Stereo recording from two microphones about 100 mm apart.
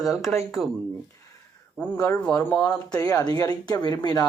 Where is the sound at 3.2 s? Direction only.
40° left (ahead or behind).